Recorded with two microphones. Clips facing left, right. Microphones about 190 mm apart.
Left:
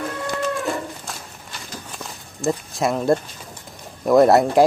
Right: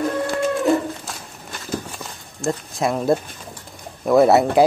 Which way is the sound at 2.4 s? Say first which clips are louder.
Left 1 dB; centre (ahead or behind).